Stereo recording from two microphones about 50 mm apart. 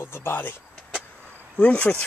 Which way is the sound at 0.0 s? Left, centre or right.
Left.